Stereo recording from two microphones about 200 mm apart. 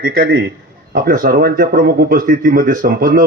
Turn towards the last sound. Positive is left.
turn(degrees=-45)  # may be behind; listen again after turning